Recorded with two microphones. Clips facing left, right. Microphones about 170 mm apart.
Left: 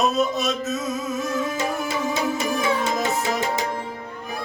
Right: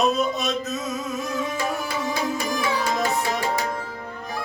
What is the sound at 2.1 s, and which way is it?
Music, 25° left (ahead or behind).